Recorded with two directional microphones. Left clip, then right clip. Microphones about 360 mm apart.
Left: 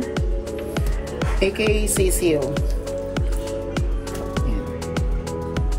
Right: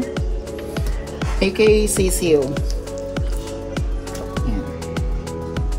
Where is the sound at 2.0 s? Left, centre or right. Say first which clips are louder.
Right 1 dB; right.